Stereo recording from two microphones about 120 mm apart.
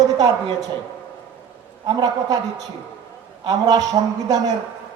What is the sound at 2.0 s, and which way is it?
A man's voice, 30° right (ahead or behind).